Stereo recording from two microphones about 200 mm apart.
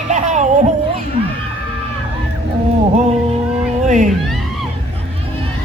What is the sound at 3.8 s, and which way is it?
Speech, 40° right (ahead or behind).